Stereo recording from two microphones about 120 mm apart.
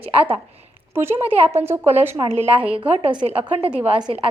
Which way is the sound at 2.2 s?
50° right (ahead or behind).